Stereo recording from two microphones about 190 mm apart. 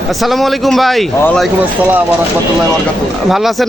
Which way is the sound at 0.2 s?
Centre (ahead or behind).